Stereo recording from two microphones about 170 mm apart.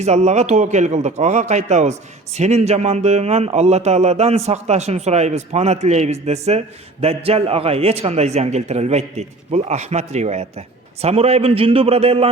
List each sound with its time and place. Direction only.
0.0 s a man's voice: 40° right (ahead or behind)